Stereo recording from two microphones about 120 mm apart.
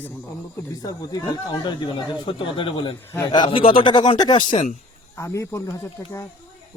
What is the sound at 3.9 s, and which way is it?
Speech, 35° left (ahead or behind).